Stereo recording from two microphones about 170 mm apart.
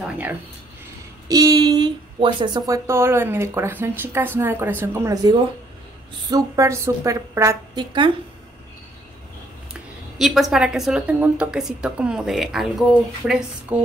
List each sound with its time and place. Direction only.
1.3 s a woman's voice: 20° right (ahead or behind)
10.1 s a woman's voice: centre (ahead or behind)